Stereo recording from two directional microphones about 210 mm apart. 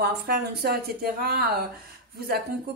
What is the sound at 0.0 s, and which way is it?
A woman's voice, 50° right (ahead or behind).